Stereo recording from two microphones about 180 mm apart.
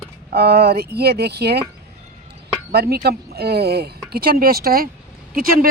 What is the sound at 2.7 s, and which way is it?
Speech, 60° right (ahead or behind).